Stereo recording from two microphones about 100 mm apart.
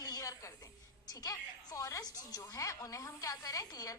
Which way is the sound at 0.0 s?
35° left (ahead or behind).